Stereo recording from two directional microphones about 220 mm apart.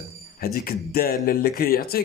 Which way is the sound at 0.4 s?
45° left (ahead or behind).